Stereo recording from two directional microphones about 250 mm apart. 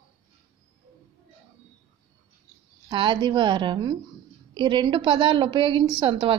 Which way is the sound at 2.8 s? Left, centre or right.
Centre.